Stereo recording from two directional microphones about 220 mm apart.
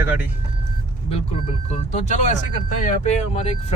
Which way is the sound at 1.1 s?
30° left (ahead or behind).